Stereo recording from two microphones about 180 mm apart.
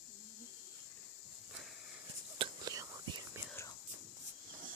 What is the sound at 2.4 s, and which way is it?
Whispering, 20° right (ahead or behind).